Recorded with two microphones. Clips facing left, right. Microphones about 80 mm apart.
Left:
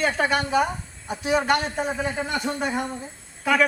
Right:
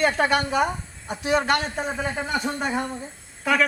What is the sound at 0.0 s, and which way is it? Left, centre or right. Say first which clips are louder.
A woman's voice: right 2 dB; centre.